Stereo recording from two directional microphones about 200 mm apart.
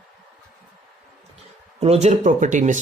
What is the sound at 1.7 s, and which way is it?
Speech, 30° right (ahead or behind).